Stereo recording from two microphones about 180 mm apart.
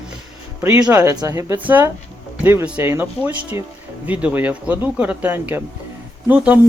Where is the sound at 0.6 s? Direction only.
15° right (ahead or behind).